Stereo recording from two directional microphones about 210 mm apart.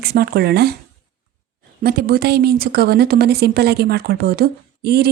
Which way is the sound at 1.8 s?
45° right (ahead or behind).